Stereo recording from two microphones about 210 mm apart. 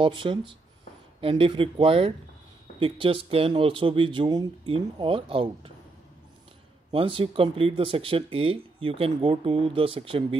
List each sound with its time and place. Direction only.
0.0 s speech: 25° right (ahead or behind)
6.9 s speech: 25° right (ahead or behind)